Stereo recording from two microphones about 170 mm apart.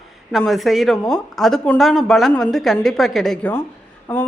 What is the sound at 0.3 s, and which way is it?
Speech, centre (ahead or behind).